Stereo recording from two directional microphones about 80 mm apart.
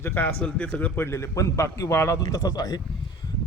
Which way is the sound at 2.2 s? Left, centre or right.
Left.